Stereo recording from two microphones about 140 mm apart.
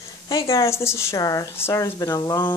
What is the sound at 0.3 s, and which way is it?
Speech, 20° left (ahead or behind).